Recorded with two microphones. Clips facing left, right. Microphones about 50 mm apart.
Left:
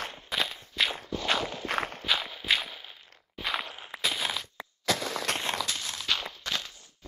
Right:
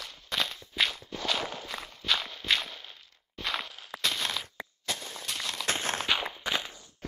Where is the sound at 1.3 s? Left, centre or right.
Left.